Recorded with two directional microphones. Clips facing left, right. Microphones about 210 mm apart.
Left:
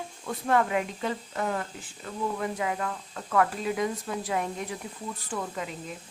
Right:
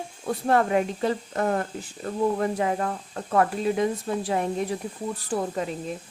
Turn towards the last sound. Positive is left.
turn(degrees=-35)  # may be behind; listen again after turning